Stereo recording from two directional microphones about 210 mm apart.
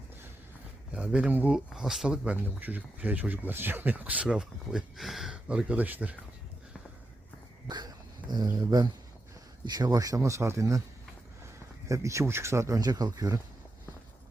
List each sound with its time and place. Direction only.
0.9 s speech: 5° right (ahead or behind)
7.7 s dog: 20° right (ahead or behind)
8.5 s speech: 20° right (ahead or behind)
11.9 s speech: 15° right (ahead or behind)